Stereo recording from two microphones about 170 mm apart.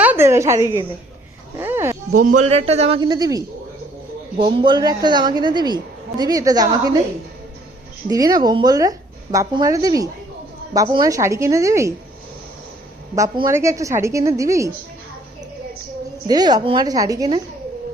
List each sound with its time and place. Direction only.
0.0 s a sound: 10° right (ahead or behind)
1.5 s speech: 15° right (ahead or behind)
2.1 s a man's voice: 50° right (ahead or behind); by 7.0 s 25° right (ahead or behind)
8.1 s a woman's voice: 20° right (ahead or behind)
13.1 s a woman's voice: 25° right (ahead or behind)
16.2 s a woman's voice: 25° right (ahead or behind)